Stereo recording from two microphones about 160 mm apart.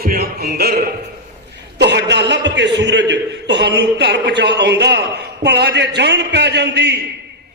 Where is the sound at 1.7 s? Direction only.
90° right.